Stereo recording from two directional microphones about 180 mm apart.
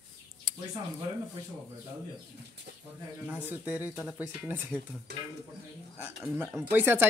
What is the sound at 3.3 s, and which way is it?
Speech, 10° right (ahead or behind).